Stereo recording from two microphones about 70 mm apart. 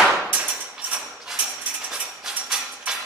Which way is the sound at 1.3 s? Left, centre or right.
Centre.